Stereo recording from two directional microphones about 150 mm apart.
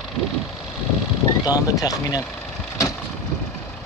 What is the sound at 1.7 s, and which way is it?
Speech, 25° left (ahead or behind).